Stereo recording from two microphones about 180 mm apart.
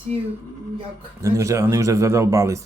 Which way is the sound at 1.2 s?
15° right (ahead or behind).